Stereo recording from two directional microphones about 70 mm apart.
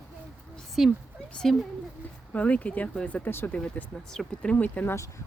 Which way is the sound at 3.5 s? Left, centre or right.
Left.